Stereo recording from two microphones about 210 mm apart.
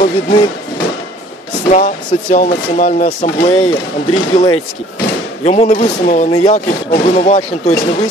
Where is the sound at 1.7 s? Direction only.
35° left (ahead or behind).